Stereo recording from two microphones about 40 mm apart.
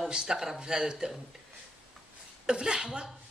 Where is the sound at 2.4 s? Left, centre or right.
Right.